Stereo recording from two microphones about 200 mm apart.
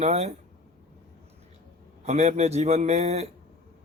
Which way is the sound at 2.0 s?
35° right (ahead or behind).